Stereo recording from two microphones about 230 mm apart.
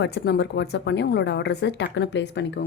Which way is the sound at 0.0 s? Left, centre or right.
Left.